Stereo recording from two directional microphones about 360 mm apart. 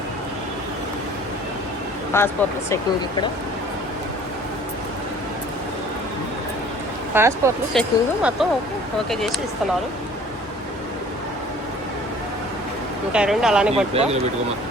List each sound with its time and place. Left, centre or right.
2.1 s speech: centre
7.1 s speech: centre
13.1 s speech: centre
13.9 s speech: centre